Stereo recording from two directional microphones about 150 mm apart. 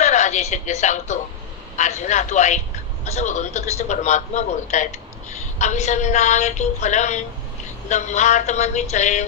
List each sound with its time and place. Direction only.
0.0 s a man's voice: 50° left (ahead or behind)